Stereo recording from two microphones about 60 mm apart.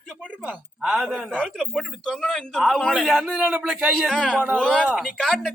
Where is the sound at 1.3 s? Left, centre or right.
Centre.